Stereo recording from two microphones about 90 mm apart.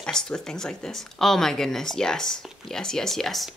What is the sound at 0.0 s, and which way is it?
Speech, 10° left (ahead or behind).